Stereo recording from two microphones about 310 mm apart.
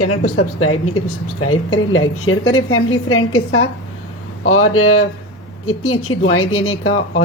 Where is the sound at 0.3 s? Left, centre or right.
Left.